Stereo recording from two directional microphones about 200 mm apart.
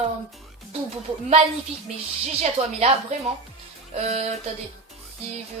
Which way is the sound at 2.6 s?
25° right (ahead or behind).